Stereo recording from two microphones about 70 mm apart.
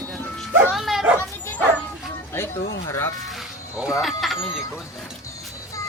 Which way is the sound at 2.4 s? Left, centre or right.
Left.